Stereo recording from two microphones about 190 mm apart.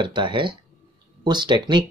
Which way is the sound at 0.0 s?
25° right (ahead or behind).